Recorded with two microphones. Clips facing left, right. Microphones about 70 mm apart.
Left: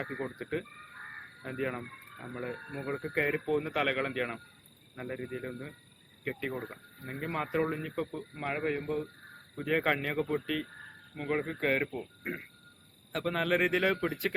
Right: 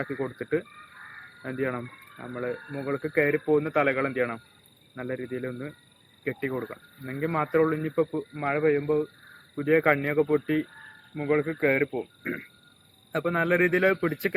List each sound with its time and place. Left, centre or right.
0.0 s speech: centre
1.4 s a man's voice: right
9.6 s a man's voice: right